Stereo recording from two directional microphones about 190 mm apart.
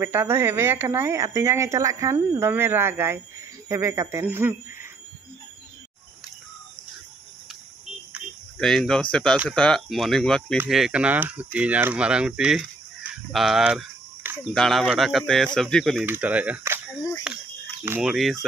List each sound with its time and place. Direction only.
0.0 s speech: 10° right (ahead or behind)
8.5 s speech: centre (ahead or behind)